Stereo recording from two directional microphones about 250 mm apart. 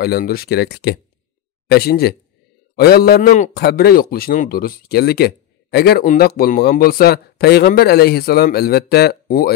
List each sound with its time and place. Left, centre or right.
0.0 s speech: left